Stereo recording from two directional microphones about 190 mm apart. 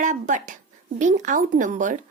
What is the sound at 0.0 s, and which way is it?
A woman's voice, 40° right (ahead or behind).